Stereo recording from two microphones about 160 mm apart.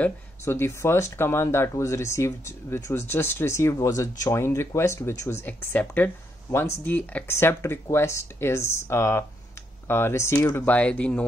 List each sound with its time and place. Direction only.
0.0 s speech: 15° left (ahead or behind)